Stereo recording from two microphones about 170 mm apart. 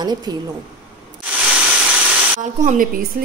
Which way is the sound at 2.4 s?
50° right (ahead or behind).